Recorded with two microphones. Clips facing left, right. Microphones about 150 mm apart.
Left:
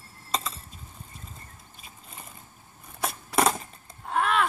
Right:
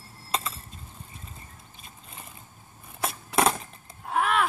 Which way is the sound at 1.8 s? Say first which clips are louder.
Even; centre (ahead or behind).